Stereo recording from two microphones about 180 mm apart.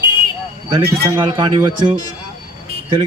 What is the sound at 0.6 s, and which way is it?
Speech, 25° right (ahead or behind).